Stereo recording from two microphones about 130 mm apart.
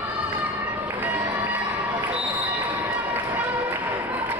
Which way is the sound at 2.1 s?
15° right (ahead or behind).